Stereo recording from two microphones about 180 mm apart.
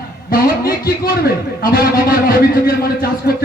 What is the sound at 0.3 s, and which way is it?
A man's voice, 55° left (ahead or behind).